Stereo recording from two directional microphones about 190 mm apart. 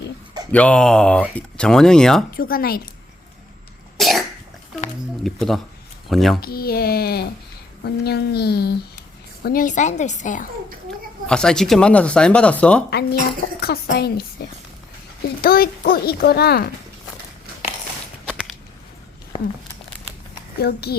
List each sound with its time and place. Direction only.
0.5 s speech: 5° left (ahead or behind)
2.3 s speech: 50° left (ahead or behind)
3.9 s cough: centre (ahead or behind)
5.2 s speech: centre (ahead or behind)
6.4 s a woman's voice: 55° left (ahead or behind)
11.3 s speech: 5° left (ahead or behind)
12.9 s speech: 60° left (ahead or behind)
15.4 s speech: 50° left (ahead or behind)
19.3 s speech: 30° left (ahead or behind)
20.6 s speech: 55° left (ahead or behind)